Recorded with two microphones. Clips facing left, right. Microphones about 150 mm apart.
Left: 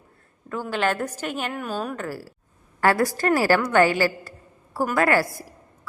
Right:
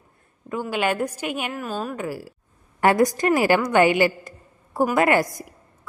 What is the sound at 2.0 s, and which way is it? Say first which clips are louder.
A woman's voice: right 2 dB; 15° right (ahead or behind).